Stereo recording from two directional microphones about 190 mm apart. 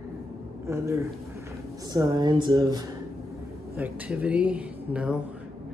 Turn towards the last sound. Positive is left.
turn(degrees=-5)  # may be behind; listen again after turning